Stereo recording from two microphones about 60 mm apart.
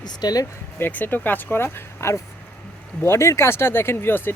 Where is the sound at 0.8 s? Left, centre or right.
Left.